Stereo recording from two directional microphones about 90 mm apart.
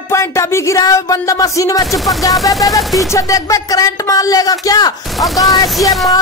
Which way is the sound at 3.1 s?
40° left (ahead or behind).